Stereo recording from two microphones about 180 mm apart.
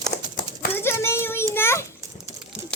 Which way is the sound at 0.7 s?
15° left (ahead or behind).